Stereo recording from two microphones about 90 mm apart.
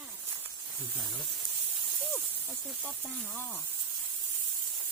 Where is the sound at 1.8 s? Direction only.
Centre (ahead or behind).